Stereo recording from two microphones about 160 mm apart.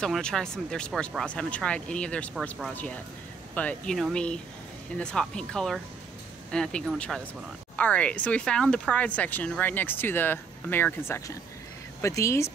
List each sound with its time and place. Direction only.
0.0 s speech: 5° left (ahead or behind)